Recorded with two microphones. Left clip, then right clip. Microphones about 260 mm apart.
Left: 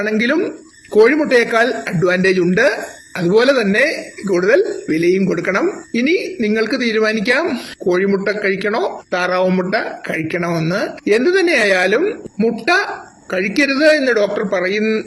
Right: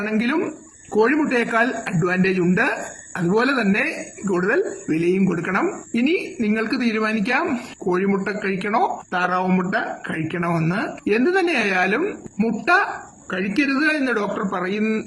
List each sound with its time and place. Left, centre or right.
0.0 s speech: centre